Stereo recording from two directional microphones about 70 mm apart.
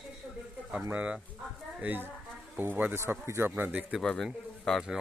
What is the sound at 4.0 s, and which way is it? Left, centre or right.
Speech, centre.